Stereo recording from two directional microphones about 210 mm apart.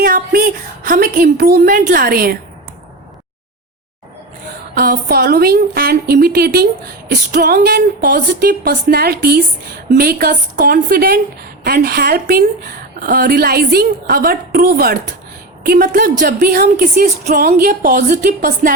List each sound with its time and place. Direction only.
0.0 s a sound: 45° right (ahead or behind)
0.9 s a woman's voice: 45° right (ahead or behind)
4.7 s a woman's voice: 45° right (ahead or behind)